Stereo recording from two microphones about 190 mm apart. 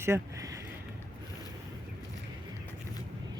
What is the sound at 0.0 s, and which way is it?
Speech, 15° right (ahead or behind).